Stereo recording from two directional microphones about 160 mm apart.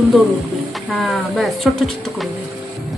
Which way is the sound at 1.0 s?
Centre (ahead or behind).